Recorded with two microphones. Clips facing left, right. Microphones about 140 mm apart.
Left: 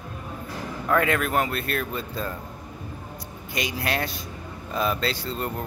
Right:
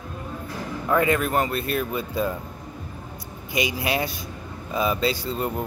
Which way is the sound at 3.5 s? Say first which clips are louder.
Right 3 dB; 5° right (ahead or behind).